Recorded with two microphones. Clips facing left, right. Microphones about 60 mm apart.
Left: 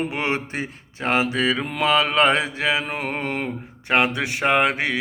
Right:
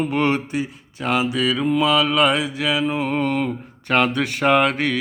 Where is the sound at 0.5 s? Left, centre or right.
Left.